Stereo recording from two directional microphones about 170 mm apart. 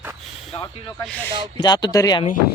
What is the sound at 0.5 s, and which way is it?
Speech, 20° left (ahead or behind).